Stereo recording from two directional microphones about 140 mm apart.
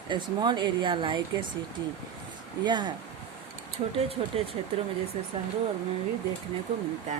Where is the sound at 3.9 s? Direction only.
45° right (ahead or behind).